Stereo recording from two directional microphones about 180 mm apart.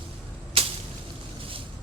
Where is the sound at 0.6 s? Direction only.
30° right (ahead or behind).